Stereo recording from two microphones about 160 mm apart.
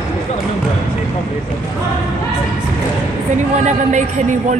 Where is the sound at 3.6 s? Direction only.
50° right (ahead or behind).